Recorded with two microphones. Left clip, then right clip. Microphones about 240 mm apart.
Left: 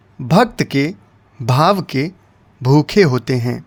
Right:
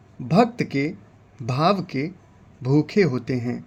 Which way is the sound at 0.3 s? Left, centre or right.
Left.